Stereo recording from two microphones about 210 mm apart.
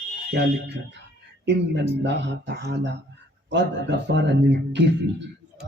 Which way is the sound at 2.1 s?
55° right (ahead or behind).